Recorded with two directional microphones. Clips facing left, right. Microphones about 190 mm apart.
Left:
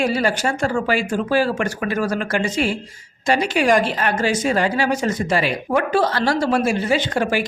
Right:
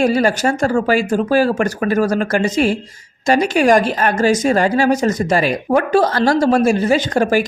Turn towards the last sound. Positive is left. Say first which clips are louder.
# right 5 dB
turn(degrees=-45)  # may be behind; listen again after turning